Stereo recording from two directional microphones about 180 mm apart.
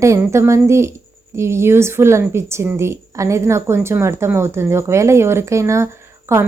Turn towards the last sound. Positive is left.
turn(degrees=-15)  # may be behind; listen again after turning